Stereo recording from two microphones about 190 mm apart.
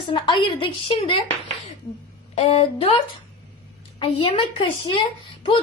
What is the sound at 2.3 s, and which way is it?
A woman's voice, 30° left (ahead or behind).